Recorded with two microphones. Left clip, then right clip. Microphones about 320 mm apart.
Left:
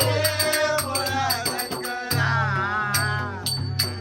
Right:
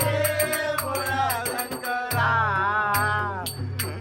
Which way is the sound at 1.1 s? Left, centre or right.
Centre.